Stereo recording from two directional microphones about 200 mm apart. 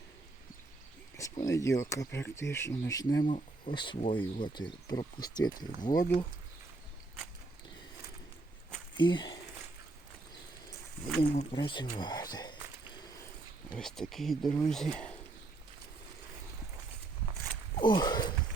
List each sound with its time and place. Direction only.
1.1 s speech: 15° left (ahead or behind)
3.2 s speech: 40° left (ahead or behind)
3.8 s speech: 25° left (ahead or behind)
9.0 s speech: 25° left (ahead or behind)
11.2 s speech: 25° left (ahead or behind)
13.7 s speech: 5° left (ahead or behind)
17.7 s speech: 20° left (ahead or behind)